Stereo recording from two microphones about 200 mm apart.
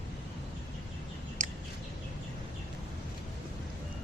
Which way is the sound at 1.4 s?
40° right (ahead or behind).